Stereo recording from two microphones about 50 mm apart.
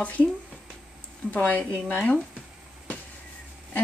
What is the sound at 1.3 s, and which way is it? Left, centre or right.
Speech, left.